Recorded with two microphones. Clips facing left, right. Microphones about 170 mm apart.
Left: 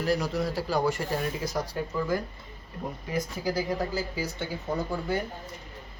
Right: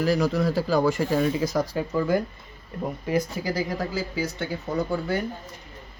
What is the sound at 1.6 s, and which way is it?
Speech, 85° right.